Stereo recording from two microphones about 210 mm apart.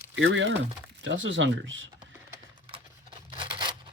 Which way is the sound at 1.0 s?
60° right (ahead or behind).